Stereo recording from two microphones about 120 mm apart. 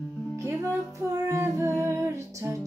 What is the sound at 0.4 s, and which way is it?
Music, 25° right (ahead or behind).